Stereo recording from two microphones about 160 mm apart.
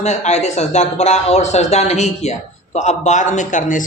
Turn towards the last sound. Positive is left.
turn(degrees=55)  # may be behind; listen again after turning